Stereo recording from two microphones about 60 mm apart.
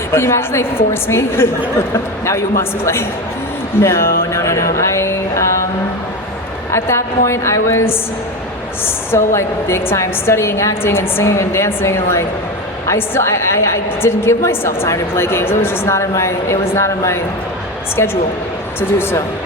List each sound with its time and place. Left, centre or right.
0.1 s a woman's voice: left
3.8 s a sound: left
6.7 s a woman's voice: left
9.1 s a woman's voice: left